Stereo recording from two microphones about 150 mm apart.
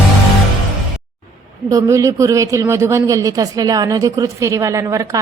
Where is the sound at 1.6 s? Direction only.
20° right (ahead or behind).